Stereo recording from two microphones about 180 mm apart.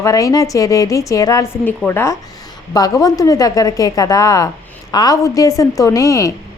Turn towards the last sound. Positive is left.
turn(degrees=15)  # may be behind; listen again after turning